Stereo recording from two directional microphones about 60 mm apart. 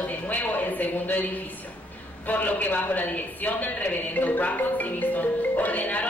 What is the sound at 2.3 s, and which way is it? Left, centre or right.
A man's voice, left.